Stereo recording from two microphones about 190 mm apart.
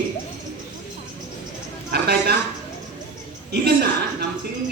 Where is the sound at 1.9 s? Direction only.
55° right (ahead or behind).